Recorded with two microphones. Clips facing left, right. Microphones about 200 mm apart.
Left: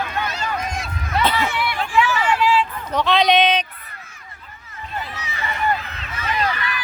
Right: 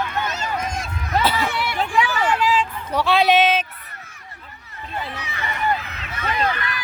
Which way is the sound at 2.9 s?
10° right (ahead or behind).